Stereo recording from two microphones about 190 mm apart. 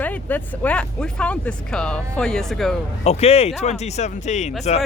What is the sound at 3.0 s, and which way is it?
Speech, 35° left (ahead or behind).